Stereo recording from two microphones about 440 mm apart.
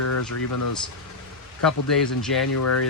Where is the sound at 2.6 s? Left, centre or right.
Left.